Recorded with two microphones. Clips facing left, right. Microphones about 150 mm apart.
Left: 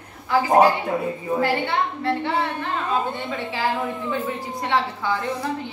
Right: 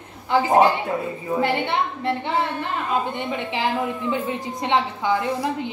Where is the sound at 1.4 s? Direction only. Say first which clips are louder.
Right 1 dB; 20° right (ahead or behind).